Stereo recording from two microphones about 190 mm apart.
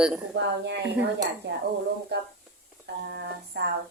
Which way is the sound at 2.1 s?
60° right (ahead or behind).